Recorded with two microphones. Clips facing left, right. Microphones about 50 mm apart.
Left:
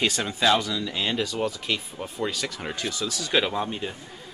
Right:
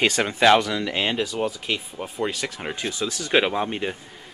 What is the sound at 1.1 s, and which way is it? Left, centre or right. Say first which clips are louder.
Speech: right 2 dB; centre.